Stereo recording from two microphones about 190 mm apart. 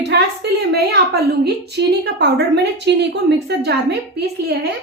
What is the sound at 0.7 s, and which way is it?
A woman's voice, 55° right (ahead or behind).